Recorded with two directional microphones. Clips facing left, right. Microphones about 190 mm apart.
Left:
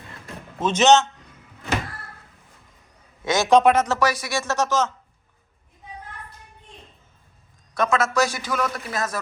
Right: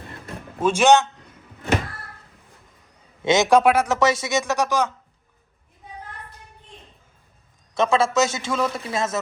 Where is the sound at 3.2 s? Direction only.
20° right (ahead or behind).